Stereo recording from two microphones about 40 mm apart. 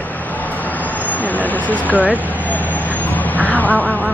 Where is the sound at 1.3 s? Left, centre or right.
Left.